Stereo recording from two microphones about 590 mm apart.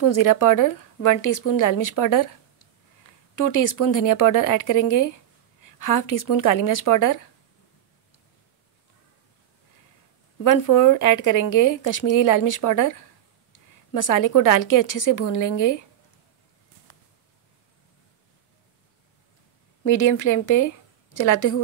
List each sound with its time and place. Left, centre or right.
0.0 s a woman's voice: left
3.3 s a woman's voice: left
10.4 s a woman's voice: left
19.8 s a woman's voice: left